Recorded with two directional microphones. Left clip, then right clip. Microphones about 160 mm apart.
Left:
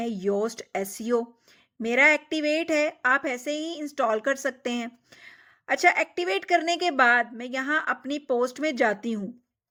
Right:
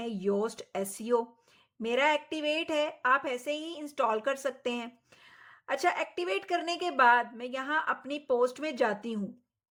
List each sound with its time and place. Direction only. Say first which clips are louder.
0.0 s a woman's voice: left 4 dB; 25° left (ahead or behind)